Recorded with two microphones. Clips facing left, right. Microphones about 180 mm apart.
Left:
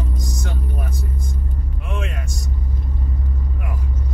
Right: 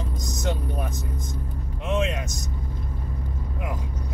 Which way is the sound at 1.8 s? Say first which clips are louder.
Right 6 dB; 20° right (ahead or behind).